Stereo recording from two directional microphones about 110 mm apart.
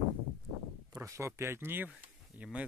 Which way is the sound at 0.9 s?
25° right (ahead or behind).